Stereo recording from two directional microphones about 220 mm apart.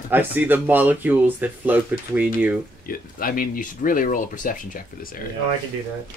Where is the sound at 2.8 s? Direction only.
40° left (ahead or behind).